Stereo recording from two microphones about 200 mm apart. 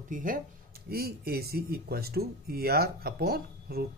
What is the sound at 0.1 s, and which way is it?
Speech, 40° right (ahead or behind).